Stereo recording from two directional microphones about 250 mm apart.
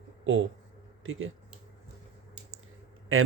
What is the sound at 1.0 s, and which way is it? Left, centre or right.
Speech, right.